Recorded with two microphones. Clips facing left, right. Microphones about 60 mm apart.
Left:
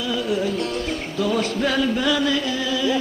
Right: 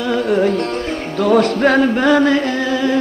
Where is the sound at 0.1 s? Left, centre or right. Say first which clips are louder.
Right 8 dB; right.